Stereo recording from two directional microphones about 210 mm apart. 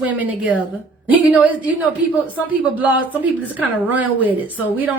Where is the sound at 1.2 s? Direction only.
5° right (ahead or behind).